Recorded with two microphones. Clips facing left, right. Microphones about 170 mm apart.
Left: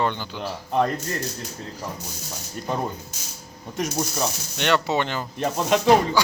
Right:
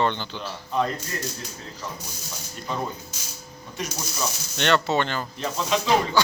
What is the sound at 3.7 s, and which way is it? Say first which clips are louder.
Speech: left 6 dB; 60° left (ahead or behind).